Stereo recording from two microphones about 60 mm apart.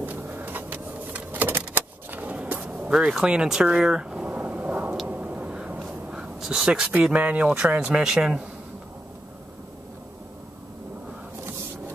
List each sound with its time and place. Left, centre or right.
0.0 s vehicle: right
2.9 s speech: centre
4.3 s a sound: right
7.2 s speech: right; by 8.5 s centre